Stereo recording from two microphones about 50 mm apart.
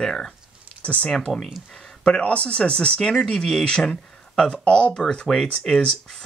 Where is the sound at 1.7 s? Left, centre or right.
Centre.